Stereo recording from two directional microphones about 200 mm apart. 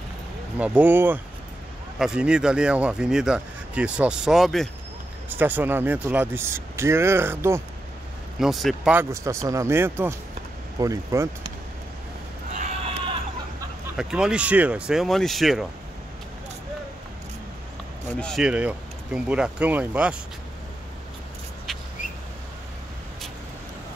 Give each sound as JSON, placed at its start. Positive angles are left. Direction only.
{"t": 0.6, "sound": "speech", "side_deg": -10}
{"t": 8.4, "sound": "speech", "side_deg": 0}
{"t": 9.1, "sound": "speech", "side_deg": -15}
{"t": 13.9, "sound": "speech", "side_deg": -5}
{"t": 18.2, "sound": "speech", "side_deg": 0}